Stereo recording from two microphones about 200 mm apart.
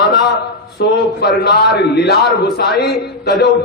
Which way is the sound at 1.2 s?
55° left (ahead or behind).